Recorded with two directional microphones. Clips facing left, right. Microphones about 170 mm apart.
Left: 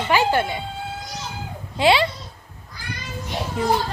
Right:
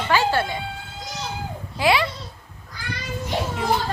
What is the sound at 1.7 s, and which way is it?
Speech, 25° left (ahead or behind).